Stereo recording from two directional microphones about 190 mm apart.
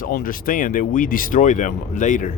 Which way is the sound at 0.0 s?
45° left (ahead or behind).